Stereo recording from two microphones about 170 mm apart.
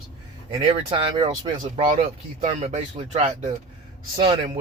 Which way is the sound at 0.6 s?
30° right (ahead or behind).